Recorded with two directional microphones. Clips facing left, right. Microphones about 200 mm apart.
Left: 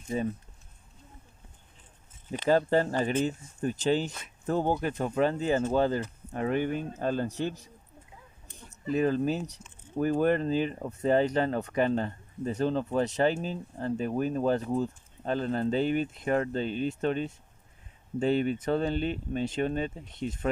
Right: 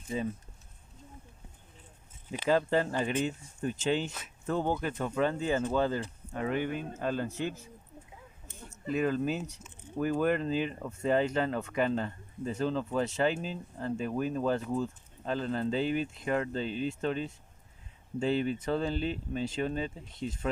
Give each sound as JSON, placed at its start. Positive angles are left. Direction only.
{"t": 0.1, "sound": "speech", "side_deg": 45}
{"t": 2.5, "sound": "speech", "side_deg": 40}
{"t": 8.9, "sound": "speech", "side_deg": 40}